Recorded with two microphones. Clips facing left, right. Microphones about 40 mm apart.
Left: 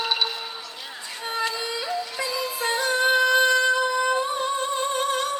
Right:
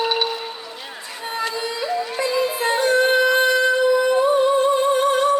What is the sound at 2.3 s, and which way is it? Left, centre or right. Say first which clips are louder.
Music: right 8 dB; right.